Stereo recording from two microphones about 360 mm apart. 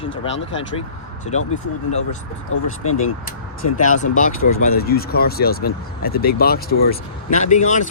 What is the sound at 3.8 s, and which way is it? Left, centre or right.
Speech, left.